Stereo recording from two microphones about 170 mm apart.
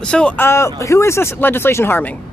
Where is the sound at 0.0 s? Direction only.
5° left (ahead or behind).